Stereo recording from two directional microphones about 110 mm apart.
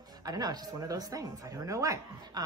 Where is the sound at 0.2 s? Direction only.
35° right (ahead or behind).